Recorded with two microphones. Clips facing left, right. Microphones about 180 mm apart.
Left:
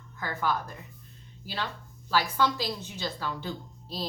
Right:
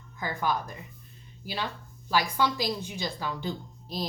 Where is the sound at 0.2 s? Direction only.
15° right (ahead or behind).